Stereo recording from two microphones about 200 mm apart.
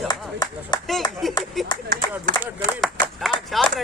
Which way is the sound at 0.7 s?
20° left (ahead or behind).